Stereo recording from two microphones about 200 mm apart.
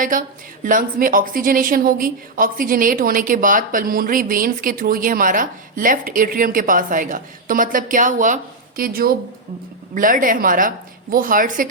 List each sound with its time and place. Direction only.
0.0 s a woman's voice: 40° right (ahead or behind)